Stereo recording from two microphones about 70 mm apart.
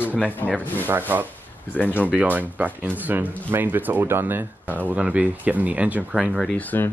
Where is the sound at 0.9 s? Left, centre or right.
Right.